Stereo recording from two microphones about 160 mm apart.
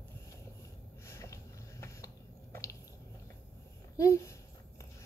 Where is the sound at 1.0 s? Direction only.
20° left (ahead or behind).